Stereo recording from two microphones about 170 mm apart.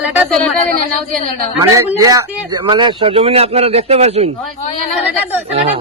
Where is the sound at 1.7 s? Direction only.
20° right (ahead or behind); by 4.3 s 40° right (ahead or behind).